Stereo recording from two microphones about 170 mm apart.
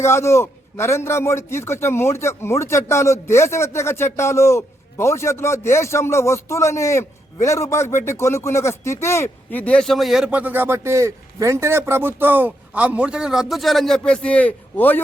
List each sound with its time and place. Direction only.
0.0 s a man's voice: 15° left (ahead or behind)